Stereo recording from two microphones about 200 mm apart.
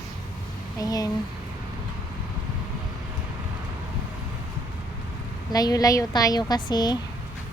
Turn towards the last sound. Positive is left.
turn(degrees=20)  # may be behind; listen again after turning